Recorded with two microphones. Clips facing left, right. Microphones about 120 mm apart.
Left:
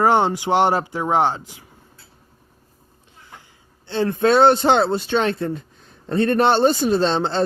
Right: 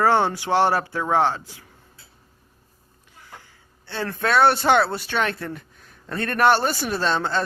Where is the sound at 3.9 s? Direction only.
25° left (ahead or behind).